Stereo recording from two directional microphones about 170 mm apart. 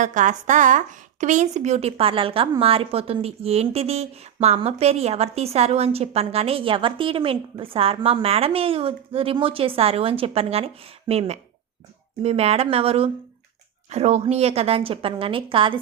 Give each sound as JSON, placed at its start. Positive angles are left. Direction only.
{"t": 0.0, "sound": "a woman's voice", "side_deg": -50}